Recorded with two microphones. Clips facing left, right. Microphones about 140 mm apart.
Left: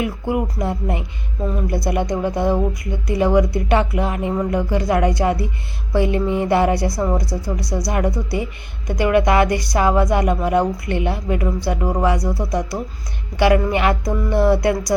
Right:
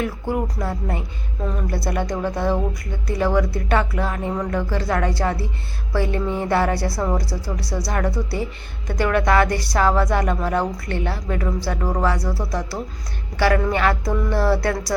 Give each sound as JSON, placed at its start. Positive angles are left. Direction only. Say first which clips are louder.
{"t": 0.0, "sound": "a woman's voice", "louder": "left 2 dB", "side_deg": 10}